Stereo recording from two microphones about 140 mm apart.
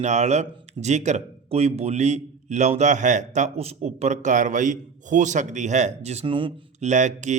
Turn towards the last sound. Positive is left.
turn(degrees=-60)  # may be behind; listen again after turning